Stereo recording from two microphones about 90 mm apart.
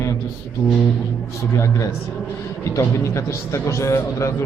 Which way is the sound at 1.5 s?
35° left (ahead or behind).